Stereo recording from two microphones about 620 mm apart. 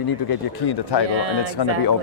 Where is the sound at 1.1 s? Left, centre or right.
Right.